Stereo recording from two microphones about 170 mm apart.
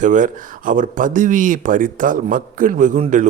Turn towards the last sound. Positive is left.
turn(degrees=-45)  # may be behind; listen again after turning